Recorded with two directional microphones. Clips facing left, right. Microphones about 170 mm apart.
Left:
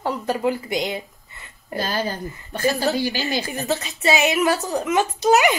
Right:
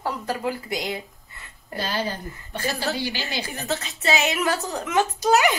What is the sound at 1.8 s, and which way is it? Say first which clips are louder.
A woman's voice: left 3 dB; 45° left (ahead or behind).